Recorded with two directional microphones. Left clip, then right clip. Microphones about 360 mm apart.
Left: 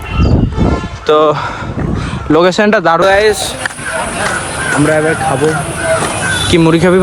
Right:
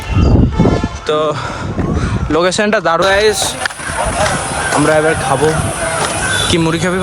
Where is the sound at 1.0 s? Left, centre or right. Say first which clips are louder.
Left 7 dB; centre.